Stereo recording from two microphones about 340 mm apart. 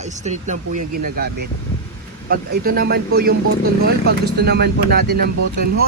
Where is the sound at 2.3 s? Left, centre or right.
Right.